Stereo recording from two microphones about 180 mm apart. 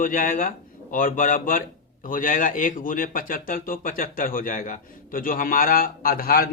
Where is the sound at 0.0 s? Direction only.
50° left (ahead or behind).